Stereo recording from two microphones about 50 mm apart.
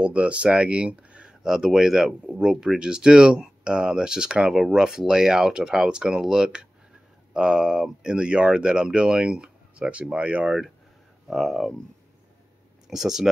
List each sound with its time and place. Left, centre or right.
0.0 s speech: right
11.2 s speech: centre
12.8 s speech: centre